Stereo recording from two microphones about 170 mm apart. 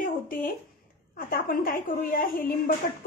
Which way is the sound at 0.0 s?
55° left (ahead or behind).